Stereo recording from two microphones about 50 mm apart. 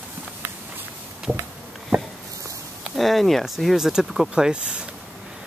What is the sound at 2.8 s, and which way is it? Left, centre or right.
Speech, centre.